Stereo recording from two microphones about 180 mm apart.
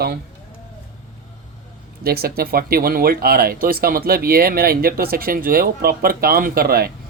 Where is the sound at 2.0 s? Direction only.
60° right (ahead or behind).